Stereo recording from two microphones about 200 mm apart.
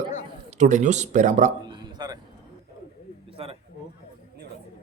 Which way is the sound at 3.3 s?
30° right (ahead or behind).